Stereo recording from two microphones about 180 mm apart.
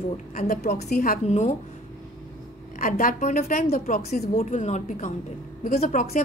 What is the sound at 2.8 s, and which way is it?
A woman's voice, 45° left (ahead or behind).